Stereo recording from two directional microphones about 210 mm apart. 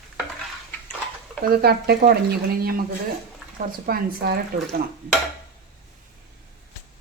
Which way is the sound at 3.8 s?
45° right (ahead or behind).